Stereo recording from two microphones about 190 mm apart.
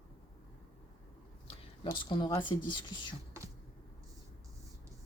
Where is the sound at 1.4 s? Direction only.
25° left (ahead or behind).